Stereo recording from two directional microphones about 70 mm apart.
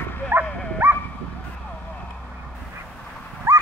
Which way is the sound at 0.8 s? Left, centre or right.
Right.